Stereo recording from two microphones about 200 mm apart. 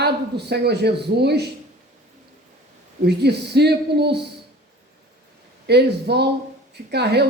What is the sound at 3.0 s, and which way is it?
Speech, 55° right (ahead or behind).